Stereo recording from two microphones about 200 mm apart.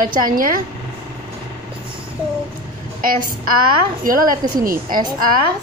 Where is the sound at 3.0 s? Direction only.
45° right (ahead or behind).